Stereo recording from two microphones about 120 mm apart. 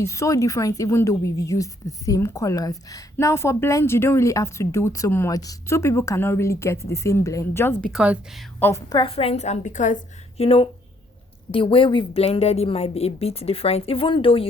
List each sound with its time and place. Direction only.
0.0 s a woman's voice: 25° left (ahead or behind)
7.9 s speech: 10° right (ahead or behind)
8.5 s a woman's voice: 15° left (ahead or behind)
9.0 s a woman's voice: 55° left (ahead or behind); by 10.4 s 90° left
10.4 s a woman's voice: 55° left (ahead or behind)
12.2 s a woman's voice: 60° left (ahead or behind)